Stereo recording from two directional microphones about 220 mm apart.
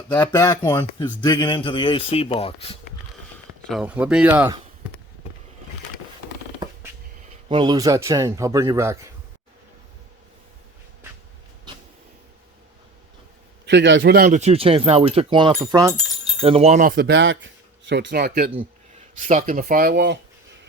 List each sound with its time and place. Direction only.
0.1 s a man's voice: 10° left (ahead or behind); by 2.7 s 25° left (ahead or behind)
3.7 s speech: 5° right (ahead or behind)
7.4 s speech: 20° right (ahead or behind)
13.7 s speech: 55° right (ahead or behind)